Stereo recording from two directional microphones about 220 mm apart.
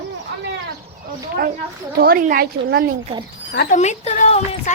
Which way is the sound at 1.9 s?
45° right (ahead or behind).